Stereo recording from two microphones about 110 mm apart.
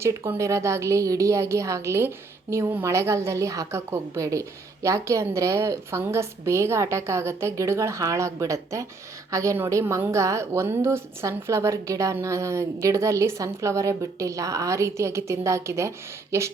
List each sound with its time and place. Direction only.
0.0 s a woman's voice: 25° right (ahead or behind)